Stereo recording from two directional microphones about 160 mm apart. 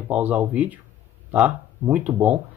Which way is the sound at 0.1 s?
10° right (ahead or behind).